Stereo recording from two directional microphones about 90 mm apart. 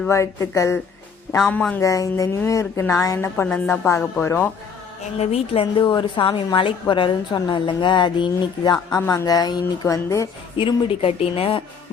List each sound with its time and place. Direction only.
0.1 s a woman's voice: 35° left (ahead or behind)
1.4 s speech: 10° left (ahead or behind)
1.8 s a woman's voice: 35° left (ahead or behind)
5.3 s speech: 90° left
5.9 s a woman's voice: 65° left (ahead or behind)
9.0 s a woman's voice: 35° left (ahead or behind)
10.6 s speech: 80° left